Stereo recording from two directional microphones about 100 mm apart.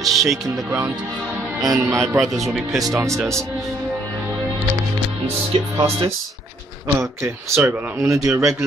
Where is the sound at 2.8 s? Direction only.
30° right (ahead or behind).